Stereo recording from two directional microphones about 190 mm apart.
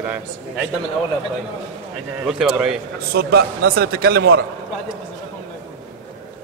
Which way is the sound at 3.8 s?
55° right (ahead or behind).